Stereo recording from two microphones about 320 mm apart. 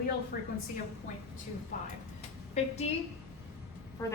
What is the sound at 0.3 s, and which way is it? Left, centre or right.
Speech, left.